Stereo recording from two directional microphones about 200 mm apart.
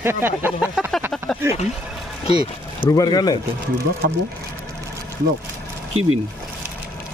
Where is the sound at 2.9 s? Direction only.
20° left (ahead or behind).